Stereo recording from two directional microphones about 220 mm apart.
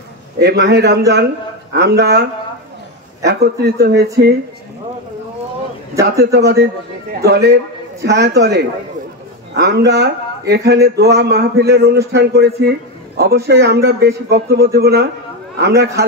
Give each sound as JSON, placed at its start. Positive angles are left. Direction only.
{"t": 0.4, "sound": "speech", "side_deg": -50}
{"t": 5.9, "sound": "speech", "side_deg": -50}